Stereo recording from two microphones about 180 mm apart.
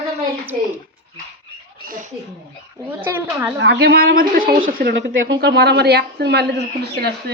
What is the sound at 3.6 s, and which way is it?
Speech, 70° right (ahead or behind).